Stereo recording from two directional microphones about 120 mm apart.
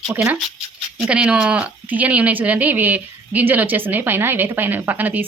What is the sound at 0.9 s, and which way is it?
Speech, 5° right (ahead or behind).